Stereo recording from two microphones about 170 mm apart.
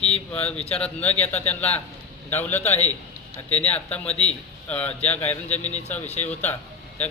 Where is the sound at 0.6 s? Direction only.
40° left (ahead or behind).